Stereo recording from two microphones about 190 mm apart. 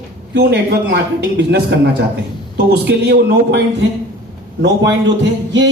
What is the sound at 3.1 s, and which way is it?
Speech, 60° right (ahead or behind).